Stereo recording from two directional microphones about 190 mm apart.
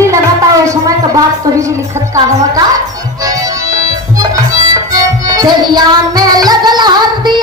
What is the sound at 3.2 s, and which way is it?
Music, 20° right (ahead or behind).